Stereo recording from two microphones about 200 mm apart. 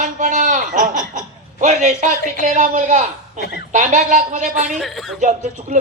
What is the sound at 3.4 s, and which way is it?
Speech, 55° left (ahead or behind).